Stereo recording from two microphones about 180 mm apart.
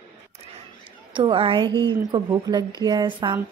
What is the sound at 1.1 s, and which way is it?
A woman's voice, 30° right (ahead or behind).